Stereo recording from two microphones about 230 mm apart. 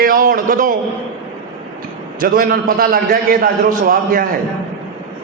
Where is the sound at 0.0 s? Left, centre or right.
Right.